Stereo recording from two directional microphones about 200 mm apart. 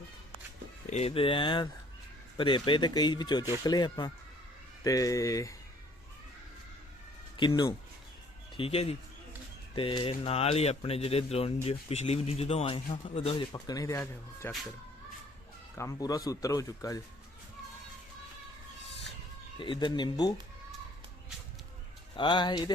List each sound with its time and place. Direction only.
0.9 s speech: 30° left (ahead or behind); by 5.5 s 15° left (ahead or behind)
7.3 s speech: 20° left (ahead or behind)
15.8 s speech: 15° left (ahead or behind)
19.5 s speech: 25° left (ahead or behind)
22.1 s speech: 25° left (ahead or behind)